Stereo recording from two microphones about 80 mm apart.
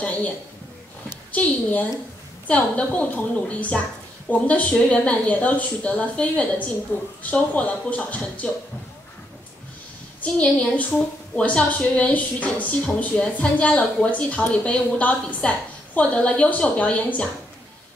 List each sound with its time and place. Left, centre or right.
1.3 s a woman's voice: centre
6.9 s a woman's voice: left
10.2 s a woman's voice: centre